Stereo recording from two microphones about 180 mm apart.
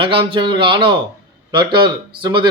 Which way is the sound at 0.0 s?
30° right (ahead or behind).